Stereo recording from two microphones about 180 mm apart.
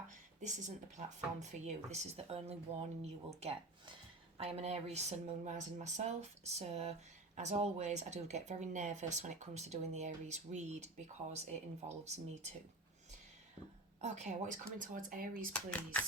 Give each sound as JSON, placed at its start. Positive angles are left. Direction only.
{"t": 0.9, "sound": "speech", "side_deg": -40}
{"t": 14.0, "sound": "speech", "side_deg": -40}
{"t": 15.5, "sound": "speech", "side_deg": 10}